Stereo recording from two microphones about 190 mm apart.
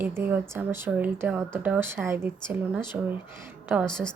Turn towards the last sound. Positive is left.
turn(degrees=5)  # may be behind; listen again after turning